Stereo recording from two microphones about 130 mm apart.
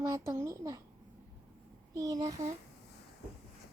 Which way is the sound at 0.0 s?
25° right (ahead or behind).